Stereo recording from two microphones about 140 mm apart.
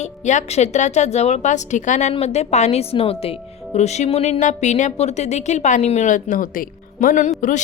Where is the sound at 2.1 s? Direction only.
50° left (ahead or behind); by 7.3 s 70° left (ahead or behind).